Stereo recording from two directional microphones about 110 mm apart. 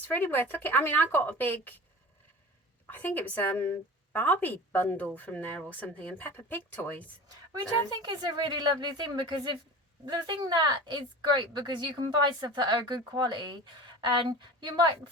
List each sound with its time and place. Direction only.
0.1 s a woman's voice: 20° left (ahead or behind)
2.8 s a woman's voice: 15° left (ahead or behind)
8.0 s a woman's voice: 40° right (ahead or behind)